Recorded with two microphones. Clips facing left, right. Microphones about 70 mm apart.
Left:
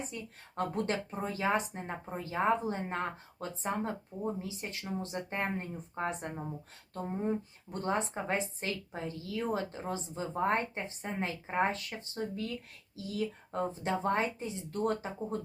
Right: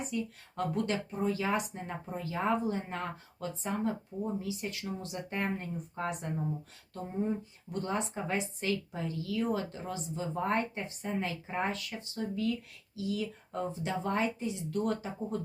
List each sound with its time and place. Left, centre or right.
0.0 s a woman's voice: left